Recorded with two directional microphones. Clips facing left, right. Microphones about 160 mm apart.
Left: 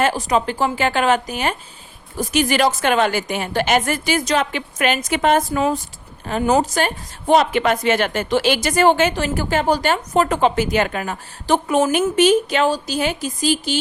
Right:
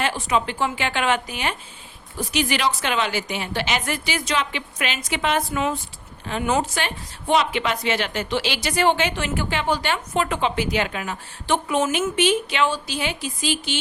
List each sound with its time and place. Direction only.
0.0 s a woman's voice: 40° left (ahead or behind)